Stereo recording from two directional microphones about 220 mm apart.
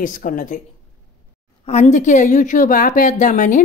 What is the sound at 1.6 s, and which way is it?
A woman's voice, 30° left (ahead or behind).